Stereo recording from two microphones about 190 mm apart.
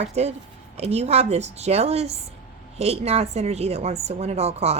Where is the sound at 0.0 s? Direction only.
35° right (ahead or behind).